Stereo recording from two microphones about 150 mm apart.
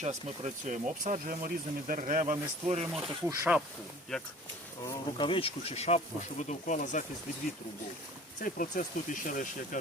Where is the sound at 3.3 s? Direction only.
10° right (ahead or behind).